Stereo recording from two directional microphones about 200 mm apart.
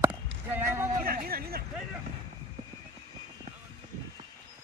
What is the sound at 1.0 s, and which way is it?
Speech, 45° right (ahead or behind).